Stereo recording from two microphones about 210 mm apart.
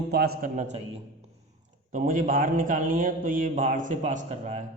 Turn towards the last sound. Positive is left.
turn(degrees=-35)  # may be behind; listen again after turning